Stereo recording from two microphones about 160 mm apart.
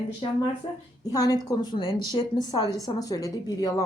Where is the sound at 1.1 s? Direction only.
20° left (ahead or behind).